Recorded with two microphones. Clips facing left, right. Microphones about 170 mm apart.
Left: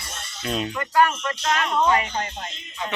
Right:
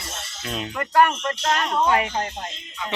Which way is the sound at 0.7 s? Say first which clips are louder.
Right 2 dB; 50° right (ahead or behind).